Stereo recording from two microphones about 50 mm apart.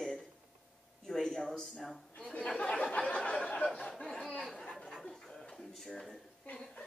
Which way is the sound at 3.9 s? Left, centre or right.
Centre.